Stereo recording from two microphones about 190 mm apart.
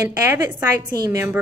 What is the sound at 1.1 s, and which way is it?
Speech, 15° right (ahead or behind).